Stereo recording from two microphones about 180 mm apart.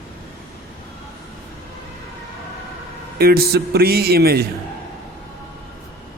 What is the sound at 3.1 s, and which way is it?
Speech, 60° right (ahead or behind).